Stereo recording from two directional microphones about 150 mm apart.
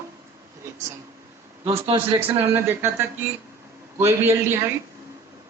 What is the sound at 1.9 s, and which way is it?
Speech, 35° right (ahead or behind).